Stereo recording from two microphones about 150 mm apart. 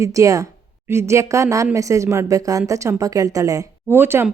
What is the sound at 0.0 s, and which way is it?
A woman's voice, 20° right (ahead or behind).